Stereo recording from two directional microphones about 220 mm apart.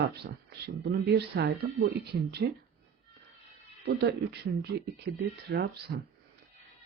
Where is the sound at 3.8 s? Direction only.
45° right (ahead or behind).